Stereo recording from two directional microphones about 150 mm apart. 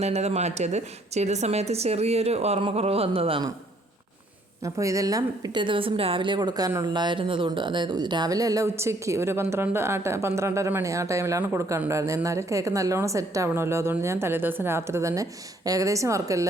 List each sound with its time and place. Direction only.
0.0 s a woman's voice: 45° right (ahead or behind)
4.6 s a woman's voice: 20° right (ahead or behind)